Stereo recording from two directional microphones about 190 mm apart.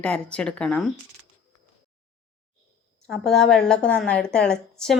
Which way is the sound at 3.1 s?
5° left (ahead or behind).